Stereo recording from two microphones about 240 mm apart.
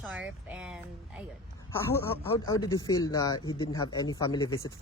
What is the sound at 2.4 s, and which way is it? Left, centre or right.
Speech, centre.